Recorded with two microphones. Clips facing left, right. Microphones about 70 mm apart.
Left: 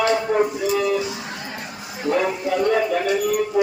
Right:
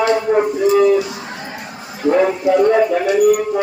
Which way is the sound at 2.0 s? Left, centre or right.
Right.